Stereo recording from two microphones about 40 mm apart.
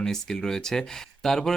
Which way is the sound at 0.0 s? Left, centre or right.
Centre.